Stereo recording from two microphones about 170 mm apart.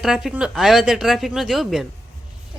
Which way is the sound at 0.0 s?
Centre (ahead or behind).